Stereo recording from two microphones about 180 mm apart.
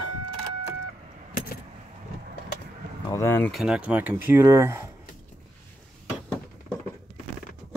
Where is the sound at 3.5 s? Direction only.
5° right (ahead or behind).